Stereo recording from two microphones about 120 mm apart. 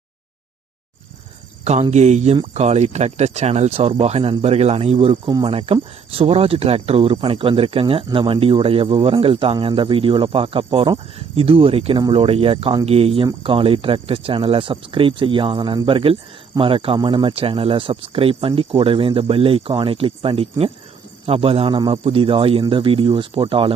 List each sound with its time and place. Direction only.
1.6 s speech: 70° right (ahead or behind); by 21.8 s 50° right (ahead or behind)
21.8 s speech: 35° right (ahead or behind)
22.0 s speech: 50° right (ahead or behind)